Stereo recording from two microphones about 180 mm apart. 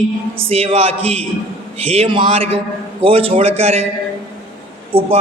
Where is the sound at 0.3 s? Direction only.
30° right (ahead or behind).